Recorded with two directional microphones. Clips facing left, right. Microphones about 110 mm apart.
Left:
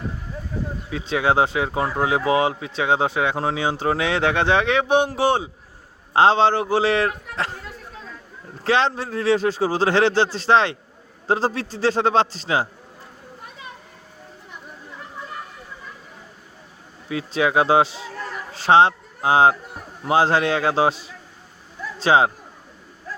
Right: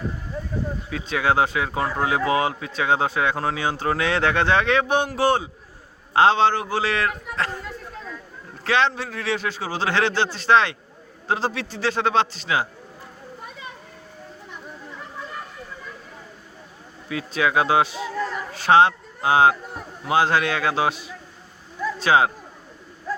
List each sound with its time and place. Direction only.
0.9 s speech: 20° left (ahead or behind)
8.6 s a man's voice: 30° left (ahead or behind)
17.1 s a man's voice: 25° left (ahead or behind)